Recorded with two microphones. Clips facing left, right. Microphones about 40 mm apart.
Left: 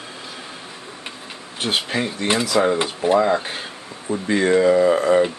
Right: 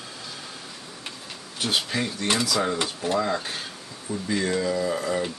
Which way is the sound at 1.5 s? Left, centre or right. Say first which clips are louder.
Left 4 dB; left.